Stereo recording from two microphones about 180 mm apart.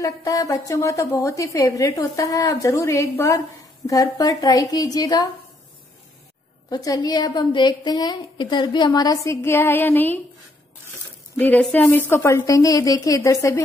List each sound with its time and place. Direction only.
0.0 s a woman's voice: 20° left (ahead or behind)
6.7 s a woman's voice: 20° left (ahead or behind)
11.3 s a woman's voice: 10° left (ahead or behind)